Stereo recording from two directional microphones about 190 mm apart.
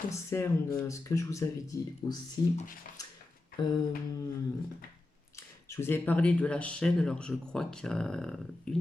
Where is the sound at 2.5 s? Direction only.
45° left (ahead or behind).